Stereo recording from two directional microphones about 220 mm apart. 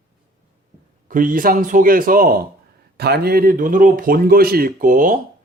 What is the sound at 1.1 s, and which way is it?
Speech, 40° right (ahead or behind).